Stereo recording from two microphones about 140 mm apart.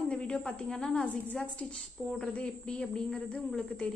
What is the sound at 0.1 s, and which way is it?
A woman's voice, 5° left (ahead or behind).